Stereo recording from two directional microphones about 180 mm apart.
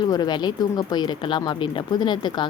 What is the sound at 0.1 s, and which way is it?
A woman's voice, 25° left (ahead or behind).